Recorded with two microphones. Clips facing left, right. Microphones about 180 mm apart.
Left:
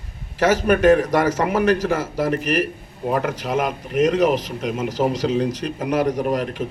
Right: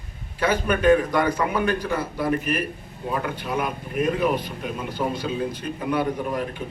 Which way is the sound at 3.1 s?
45° left (ahead or behind).